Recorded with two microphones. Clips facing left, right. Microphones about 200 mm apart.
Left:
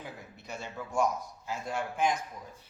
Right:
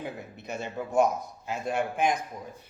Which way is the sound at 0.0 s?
20° right (ahead or behind).